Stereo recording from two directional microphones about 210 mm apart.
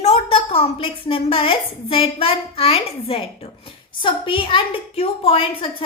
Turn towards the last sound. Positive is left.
turn(degrees=25)  # may be behind; listen again after turning